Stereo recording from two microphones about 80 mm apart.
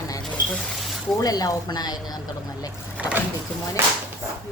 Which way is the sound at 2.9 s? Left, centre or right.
Centre.